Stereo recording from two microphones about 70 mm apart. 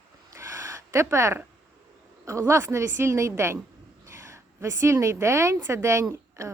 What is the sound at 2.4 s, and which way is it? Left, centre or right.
A woman's voice, right.